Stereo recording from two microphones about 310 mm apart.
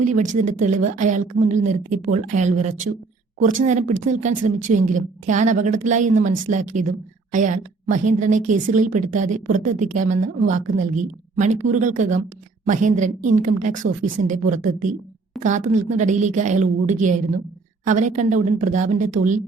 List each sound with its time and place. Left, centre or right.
0.0 s speech: right